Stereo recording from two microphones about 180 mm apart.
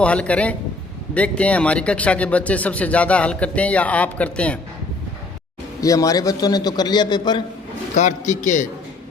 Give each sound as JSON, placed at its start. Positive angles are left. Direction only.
{"t": 0.0, "sound": "speech", "side_deg": 5}
{"t": 5.8, "sound": "a man's voice", "side_deg": 20}
{"t": 7.9, "sound": "a man's voice", "side_deg": 40}